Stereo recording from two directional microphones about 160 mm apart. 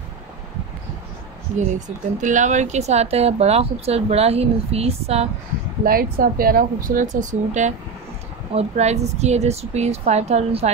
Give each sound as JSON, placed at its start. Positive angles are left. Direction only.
{"t": 2.1, "sound": "speech", "side_deg": -50}
{"t": 5.9, "sound": "speech", "side_deg": -65}